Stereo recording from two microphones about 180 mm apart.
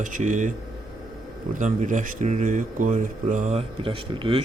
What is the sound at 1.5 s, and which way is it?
A man's voice, 45° right (ahead or behind).